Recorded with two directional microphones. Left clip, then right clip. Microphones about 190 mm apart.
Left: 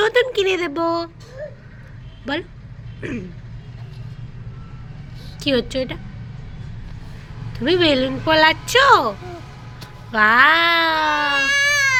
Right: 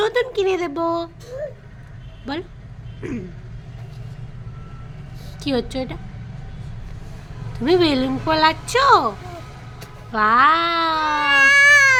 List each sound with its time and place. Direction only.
0.0 s speech: 5° left (ahead or behind)
2.3 s speech: 5° left (ahead or behind)
5.4 s speech: centre (ahead or behind)
7.5 s speech: 5° right (ahead or behind)
11.4 s baby cry: 20° right (ahead or behind)